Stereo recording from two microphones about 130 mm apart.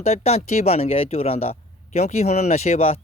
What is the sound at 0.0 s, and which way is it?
Speech, 55° left (ahead or behind).